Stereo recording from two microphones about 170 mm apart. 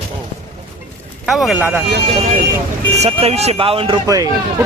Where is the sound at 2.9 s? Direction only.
40° right (ahead or behind).